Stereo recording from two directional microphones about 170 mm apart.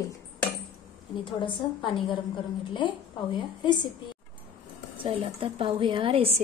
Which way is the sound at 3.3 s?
25° left (ahead or behind).